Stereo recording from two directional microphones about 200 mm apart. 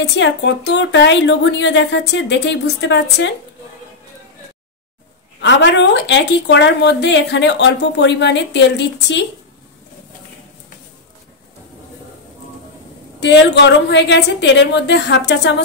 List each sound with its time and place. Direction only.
0.1 s speech: 60° left (ahead or behind)
5.4 s speech: 65° left (ahead or behind)
13.2 s speech: 60° left (ahead or behind)